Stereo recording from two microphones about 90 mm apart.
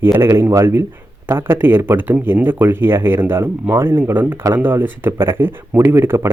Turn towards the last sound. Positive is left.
turn(degrees=-25)  # may be behind; listen again after turning